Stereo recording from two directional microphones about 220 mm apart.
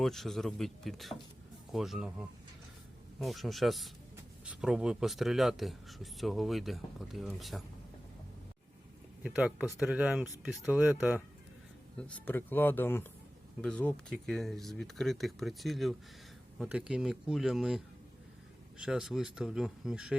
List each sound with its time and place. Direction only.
0.0 s speech: centre (ahead or behind)
3.2 s speech: centre (ahead or behind)
9.2 s speech: 5° right (ahead or behind)
11.9 s speech: 5° left (ahead or behind)